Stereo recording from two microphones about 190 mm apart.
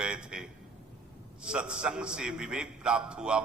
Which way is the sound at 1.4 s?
5° right (ahead or behind).